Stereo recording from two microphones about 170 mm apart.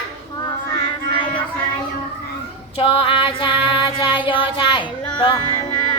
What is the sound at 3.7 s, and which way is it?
Female singing, 30° left (ahead or behind).